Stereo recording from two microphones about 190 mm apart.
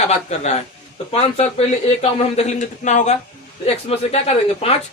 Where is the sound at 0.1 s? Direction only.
35° left (ahead or behind).